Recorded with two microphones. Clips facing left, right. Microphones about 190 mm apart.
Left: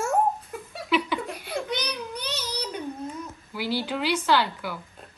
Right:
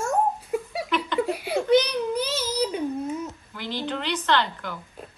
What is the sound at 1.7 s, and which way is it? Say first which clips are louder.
Baby cry: right 11 dB; 5° right (ahead or behind).